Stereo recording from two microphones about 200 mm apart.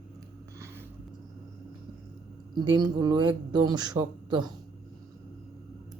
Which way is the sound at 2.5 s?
20° right (ahead or behind).